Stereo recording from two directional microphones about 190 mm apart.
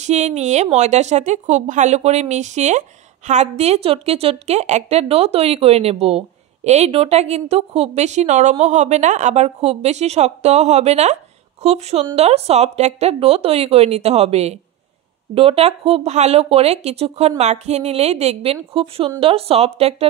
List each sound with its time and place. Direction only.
0.0 s a woman's voice: 35° right (ahead or behind)